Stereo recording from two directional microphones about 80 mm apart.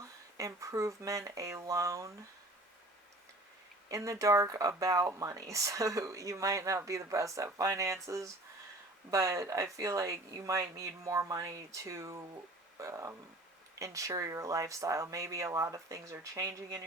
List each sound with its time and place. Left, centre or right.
0.3 s speech: right
3.8 s speech: right